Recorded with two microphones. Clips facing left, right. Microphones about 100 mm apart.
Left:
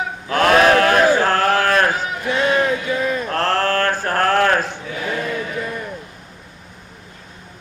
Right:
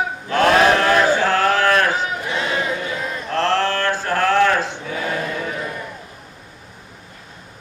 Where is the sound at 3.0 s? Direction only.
60° left (ahead or behind).